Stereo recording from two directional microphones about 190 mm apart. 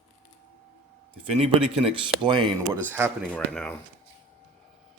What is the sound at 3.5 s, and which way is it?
Speech, 5° left (ahead or behind).